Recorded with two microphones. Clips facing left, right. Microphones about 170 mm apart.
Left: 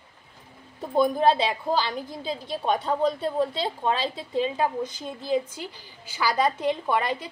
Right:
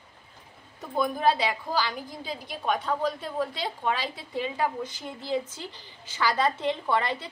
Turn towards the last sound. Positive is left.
turn(degrees=10)  # may be behind; listen again after turning